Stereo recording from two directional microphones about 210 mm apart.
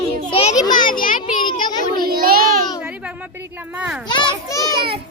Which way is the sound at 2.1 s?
45° right (ahead or behind).